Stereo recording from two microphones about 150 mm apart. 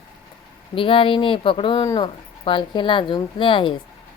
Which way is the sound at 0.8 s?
35° left (ahead or behind).